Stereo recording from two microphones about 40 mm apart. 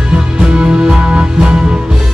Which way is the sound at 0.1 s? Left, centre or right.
Right.